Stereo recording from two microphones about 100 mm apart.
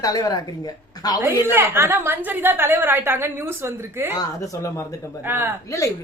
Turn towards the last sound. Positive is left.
turn(degrees=30)  # may be behind; listen again after turning